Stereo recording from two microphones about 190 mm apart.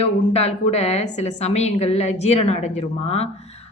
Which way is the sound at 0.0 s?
35° left (ahead or behind).